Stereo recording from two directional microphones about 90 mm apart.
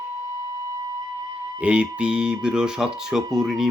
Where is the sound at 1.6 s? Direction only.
10° right (ahead or behind).